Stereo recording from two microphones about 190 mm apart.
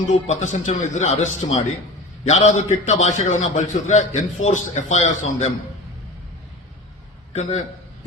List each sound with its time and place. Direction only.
0.1 s a man's voice: 40° left (ahead or behind)